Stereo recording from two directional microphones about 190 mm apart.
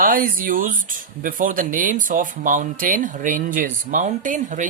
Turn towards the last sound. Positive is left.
turn(degrees=-40)  # may be behind; listen again after turning